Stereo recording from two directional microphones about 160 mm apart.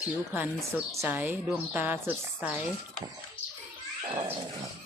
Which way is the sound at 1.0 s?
10° right (ahead or behind).